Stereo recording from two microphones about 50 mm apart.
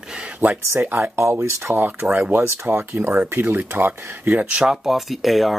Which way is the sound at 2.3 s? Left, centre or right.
Right.